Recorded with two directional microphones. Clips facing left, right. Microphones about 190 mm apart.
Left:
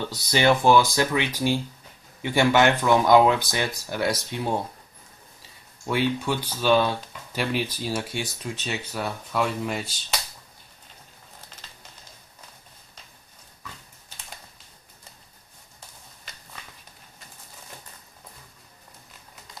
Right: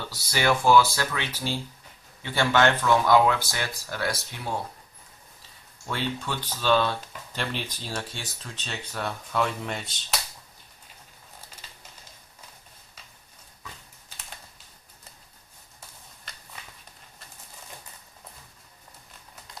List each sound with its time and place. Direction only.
0.0 s speech: 20° left (ahead or behind)
5.9 s speech: 15° left (ahead or behind)